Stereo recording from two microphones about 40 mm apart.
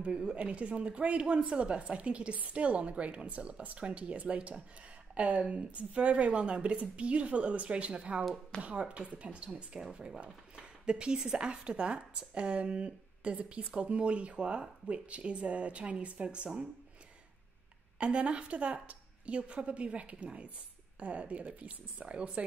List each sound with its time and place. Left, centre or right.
0.1 s speech: centre
0.4 s speech: right
17.9 s speech: right